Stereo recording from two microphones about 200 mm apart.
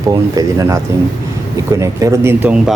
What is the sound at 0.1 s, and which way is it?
Speech, 15° right (ahead or behind).